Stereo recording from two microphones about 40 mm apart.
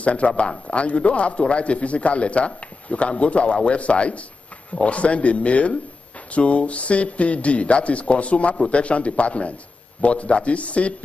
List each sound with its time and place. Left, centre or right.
0.0 s a man's voice: left